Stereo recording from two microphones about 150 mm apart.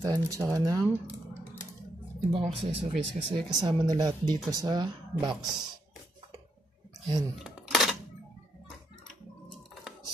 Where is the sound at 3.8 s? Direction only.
25° right (ahead or behind).